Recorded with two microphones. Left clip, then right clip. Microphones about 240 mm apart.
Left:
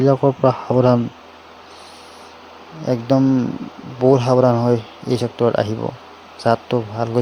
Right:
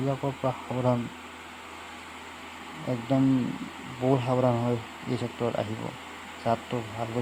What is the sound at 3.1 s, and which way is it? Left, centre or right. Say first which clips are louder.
Speech: left 9 dB; left.